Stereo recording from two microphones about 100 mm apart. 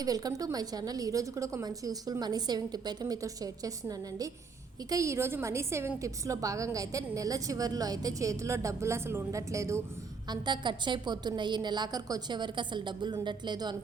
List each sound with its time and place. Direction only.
0.0 s a woman's voice: 40° right (ahead or behind)
10.2 s a woman's voice: 50° right (ahead or behind)